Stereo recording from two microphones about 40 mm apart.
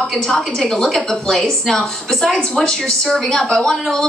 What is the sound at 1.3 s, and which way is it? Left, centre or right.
A woman's voice, centre.